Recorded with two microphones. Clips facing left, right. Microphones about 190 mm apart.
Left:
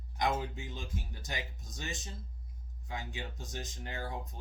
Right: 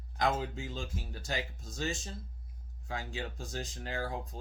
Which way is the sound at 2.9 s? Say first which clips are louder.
Right 3 dB; 20° left (ahead or behind).